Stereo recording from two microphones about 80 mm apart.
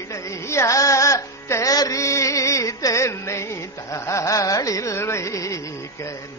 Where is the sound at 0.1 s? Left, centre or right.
Left.